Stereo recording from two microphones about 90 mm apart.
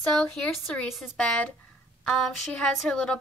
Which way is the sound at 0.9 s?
Centre (ahead or behind).